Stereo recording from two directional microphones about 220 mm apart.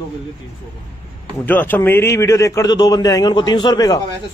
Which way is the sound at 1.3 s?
10° left (ahead or behind).